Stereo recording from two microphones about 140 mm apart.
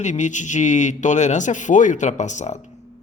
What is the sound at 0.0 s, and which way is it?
A man's voice, 60° left (ahead or behind).